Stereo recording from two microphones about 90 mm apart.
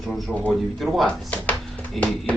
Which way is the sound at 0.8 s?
Centre (ahead or behind).